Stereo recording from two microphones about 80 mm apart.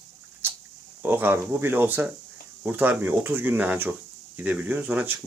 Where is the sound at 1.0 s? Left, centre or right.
Right.